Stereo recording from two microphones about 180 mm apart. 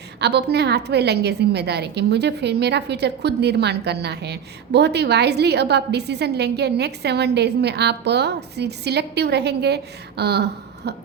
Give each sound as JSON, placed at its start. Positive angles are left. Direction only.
{"t": 0.2, "sound": "a woman's voice", "side_deg": -65}